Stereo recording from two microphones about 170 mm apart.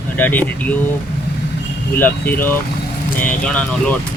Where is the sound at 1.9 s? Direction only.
10° left (ahead or behind).